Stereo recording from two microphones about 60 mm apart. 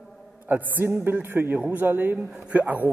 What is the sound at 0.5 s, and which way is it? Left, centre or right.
A woman's voice, right.